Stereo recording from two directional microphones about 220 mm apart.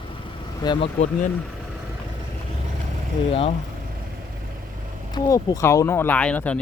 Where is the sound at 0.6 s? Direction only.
20° left (ahead or behind).